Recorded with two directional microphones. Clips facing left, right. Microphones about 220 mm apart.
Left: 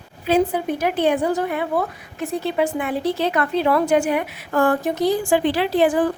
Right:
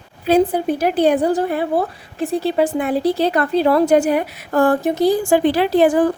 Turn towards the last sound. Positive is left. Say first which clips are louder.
# right 4 dB
turn(degrees=-40)  # may be behind; listen again after turning